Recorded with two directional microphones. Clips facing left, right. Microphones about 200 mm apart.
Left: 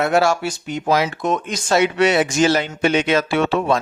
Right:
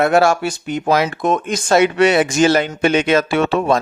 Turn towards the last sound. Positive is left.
turn(degrees=-45)  # may be behind; listen again after turning